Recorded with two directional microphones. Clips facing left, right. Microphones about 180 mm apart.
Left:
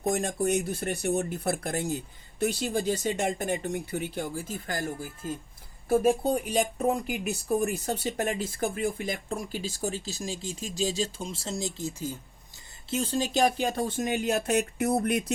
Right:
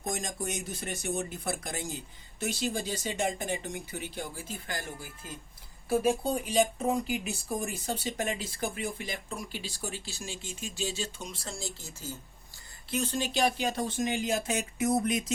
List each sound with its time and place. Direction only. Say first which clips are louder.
0.1 s speech: left 9 dB; 60° left (ahead or behind); by 12.2 s 15° left (ahead or behind)
12.9 s speech: left 3 dB; 30° left (ahead or behind); by 14.2 s 50° left (ahead or behind)
14.3 s speech: left 5 dB; 60° left (ahead or behind)